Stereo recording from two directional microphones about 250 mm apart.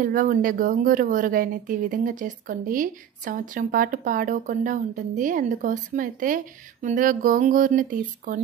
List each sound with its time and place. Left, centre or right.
0.0 s speech: right